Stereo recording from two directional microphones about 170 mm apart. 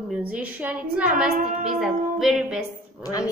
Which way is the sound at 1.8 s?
Centre (ahead or behind).